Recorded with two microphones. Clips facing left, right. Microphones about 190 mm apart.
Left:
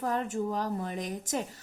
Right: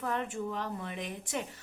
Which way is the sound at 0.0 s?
40° left (ahead or behind).